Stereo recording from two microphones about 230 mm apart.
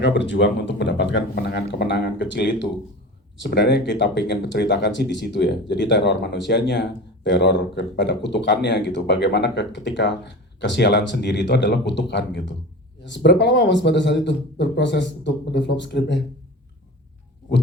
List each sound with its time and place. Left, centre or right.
0.0 s speech: left